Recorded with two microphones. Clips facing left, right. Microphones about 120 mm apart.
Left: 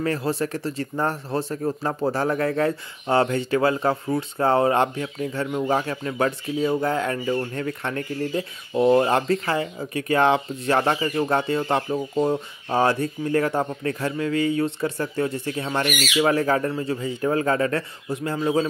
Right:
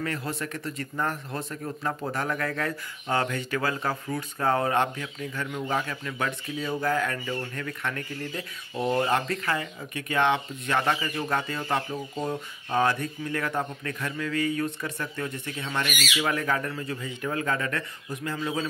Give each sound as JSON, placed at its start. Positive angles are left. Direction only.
{"t": 0.0, "sound": "speech", "side_deg": 35}